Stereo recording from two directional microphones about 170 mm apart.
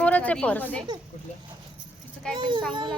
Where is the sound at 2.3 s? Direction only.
25° right (ahead or behind).